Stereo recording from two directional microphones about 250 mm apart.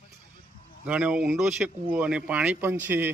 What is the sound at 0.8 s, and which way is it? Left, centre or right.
A man's voice, centre.